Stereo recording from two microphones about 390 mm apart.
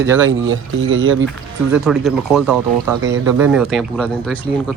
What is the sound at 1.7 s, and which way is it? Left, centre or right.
Speech, centre.